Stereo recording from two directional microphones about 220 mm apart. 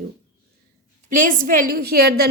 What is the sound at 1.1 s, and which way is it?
A woman's voice, 35° right (ahead or behind).